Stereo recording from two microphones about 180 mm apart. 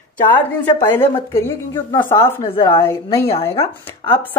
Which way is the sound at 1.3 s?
15° left (ahead or behind).